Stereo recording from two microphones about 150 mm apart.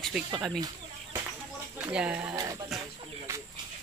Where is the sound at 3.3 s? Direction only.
15° right (ahead or behind).